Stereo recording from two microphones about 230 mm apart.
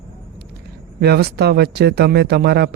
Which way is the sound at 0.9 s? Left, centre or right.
Right.